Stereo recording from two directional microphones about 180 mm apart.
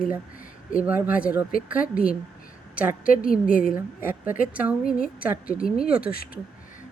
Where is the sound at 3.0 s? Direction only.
50° left (ahead or behind).